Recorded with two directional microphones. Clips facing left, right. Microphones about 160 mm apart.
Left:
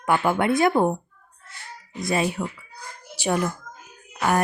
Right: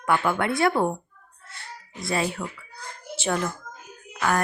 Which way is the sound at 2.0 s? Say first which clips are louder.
Left 3 dB; 20° left (ahead or behind).